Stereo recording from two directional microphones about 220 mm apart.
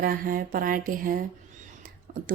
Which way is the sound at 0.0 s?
40° right (ahead or behind).